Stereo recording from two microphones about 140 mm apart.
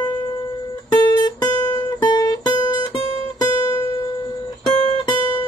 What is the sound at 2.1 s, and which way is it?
Music, 30° left (ahead or behind).